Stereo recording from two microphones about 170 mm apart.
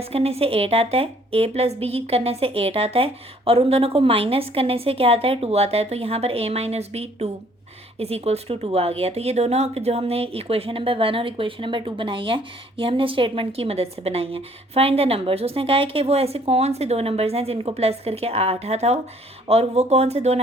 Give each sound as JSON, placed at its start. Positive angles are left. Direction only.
{"t": 0.0, "sound": "speech", "side_deg": -35}